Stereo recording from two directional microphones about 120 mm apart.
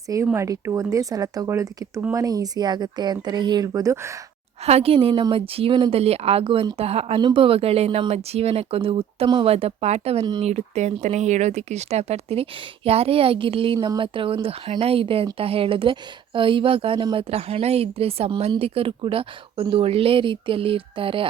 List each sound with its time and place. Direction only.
0.3 s speech: 25° right (ahead or behind)
4.6 s speech: 60° right (ahead or behind)
7.2 s speech: 40° right (ahead or behind)